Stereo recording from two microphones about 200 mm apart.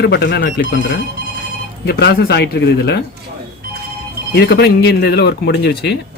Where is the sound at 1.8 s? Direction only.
55° left (ahead or behind).